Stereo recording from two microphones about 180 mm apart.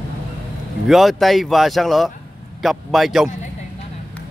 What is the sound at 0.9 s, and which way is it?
A man's voice, centre (ahead or behind).